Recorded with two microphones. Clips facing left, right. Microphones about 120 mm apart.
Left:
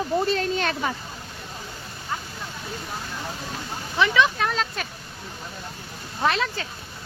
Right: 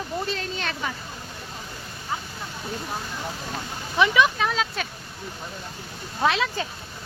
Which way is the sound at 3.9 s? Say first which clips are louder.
Right 1 dB; 15° right (ahead or behind).